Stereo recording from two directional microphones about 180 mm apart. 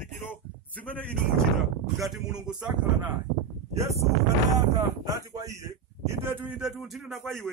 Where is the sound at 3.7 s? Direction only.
15° right (ahead or behind).